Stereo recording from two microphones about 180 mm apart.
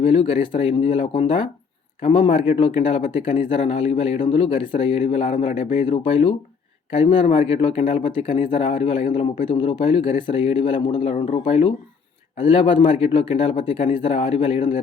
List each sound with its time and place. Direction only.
0.0 s speech: 30° left (ahead or behind)